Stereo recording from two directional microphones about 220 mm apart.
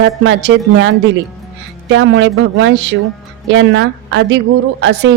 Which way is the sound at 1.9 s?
55° right (ahead or behind).